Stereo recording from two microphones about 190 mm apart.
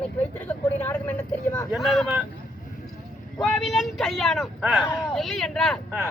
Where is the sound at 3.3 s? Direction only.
Centre (ahead or behind).